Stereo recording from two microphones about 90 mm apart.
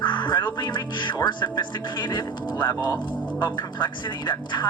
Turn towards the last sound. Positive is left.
turn(degrees=55)  # may be behind; listen again after turning